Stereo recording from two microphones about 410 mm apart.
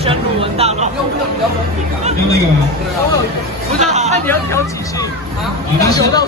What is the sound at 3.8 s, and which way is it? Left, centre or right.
Speech, centre.